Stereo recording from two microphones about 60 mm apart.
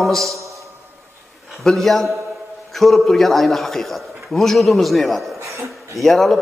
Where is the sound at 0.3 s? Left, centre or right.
Right.